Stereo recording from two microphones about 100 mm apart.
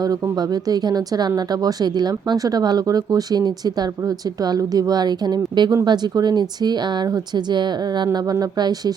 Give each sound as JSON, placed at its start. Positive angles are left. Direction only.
{"t": 0.0, "sound": "speech", "side_deg": -40}